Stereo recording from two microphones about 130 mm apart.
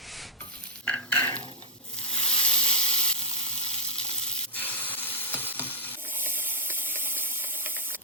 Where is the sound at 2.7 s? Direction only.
50° right (ahead or behind).